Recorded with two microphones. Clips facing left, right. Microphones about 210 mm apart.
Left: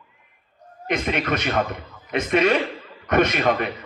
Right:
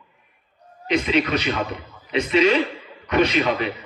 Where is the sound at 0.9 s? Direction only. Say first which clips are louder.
Right 3 dB; 55° left (ahead or behind).